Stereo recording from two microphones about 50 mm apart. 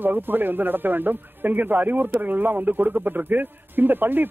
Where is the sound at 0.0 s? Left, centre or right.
Right.